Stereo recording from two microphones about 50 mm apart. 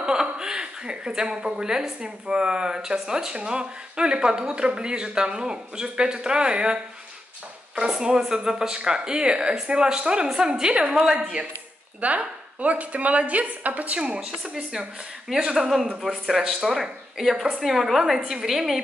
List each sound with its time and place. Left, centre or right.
0.0 s a woman's voice: centre
12.0 s a woman's voice: right
14.4 s a woman's voice: centre